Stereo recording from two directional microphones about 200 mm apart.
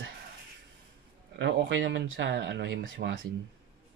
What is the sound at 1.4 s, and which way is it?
Speech, 65° right (ahead or behind).